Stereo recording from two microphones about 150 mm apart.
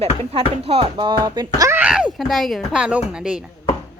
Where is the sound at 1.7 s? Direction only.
10° right (ahead or behind).